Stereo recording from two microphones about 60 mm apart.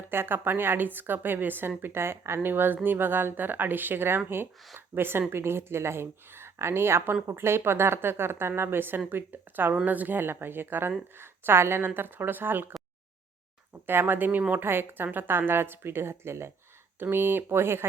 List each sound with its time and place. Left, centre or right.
0.1 s a woman's voice: right
13.8 s speech: right